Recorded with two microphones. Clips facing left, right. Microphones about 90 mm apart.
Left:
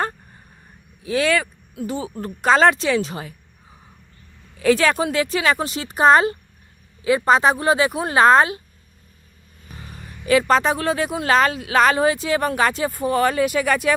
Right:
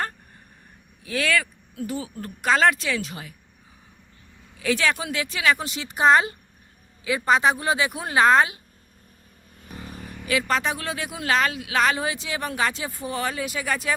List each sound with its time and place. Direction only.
1.0 s speech: 25° left (ahead or behind)
4.6 s speech: 45° left (ahead or behind)
10.2 s speech: 35° left (ahead or behind); by 13.9 s 65° left (ahead or behind)